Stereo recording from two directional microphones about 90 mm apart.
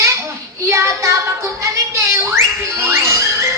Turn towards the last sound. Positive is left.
turn(degrees=-35)  # may be behind; listen again after turning